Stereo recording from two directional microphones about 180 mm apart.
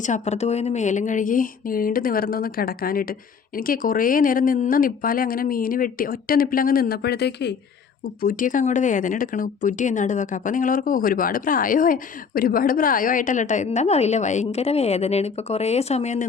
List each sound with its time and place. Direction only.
0.0 s speech: 40° left (ahead or behind); by 7.5 s 65° left (ahead or behind)
8.0 s speech: 50° left (ahead or behind)